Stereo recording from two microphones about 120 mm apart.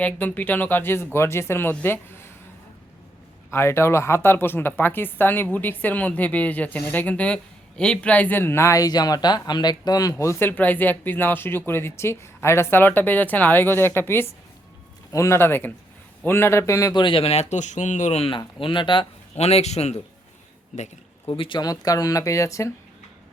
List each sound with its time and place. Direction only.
0.0 s speech: 15° left (ahead or behind)
3.5 s speech: 20° left (ahead or behind)
16.9 s speech: 40° left (ahead or behind); by 18.3 s 70° left (ahead or behind)
18.3 s speech: 45° left (ahead or behind)
19.4 s a man's voice: 60° left (ahead or behind)
21.2 s speech: 45° left (ahead or behind); by 22.7 s 25° left (ahead or behind)